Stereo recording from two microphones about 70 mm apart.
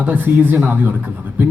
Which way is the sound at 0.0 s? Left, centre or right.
Right.